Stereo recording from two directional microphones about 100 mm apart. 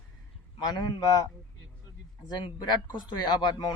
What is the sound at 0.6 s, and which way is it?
Speech, 45° left (ahead or behind).